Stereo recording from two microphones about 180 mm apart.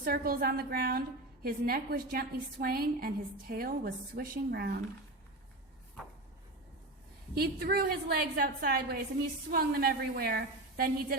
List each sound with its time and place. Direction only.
0.0 s a woman's voice: 55° right (ahead or behind)
7.3 s a woman's voice: 60° right (ahead or behind)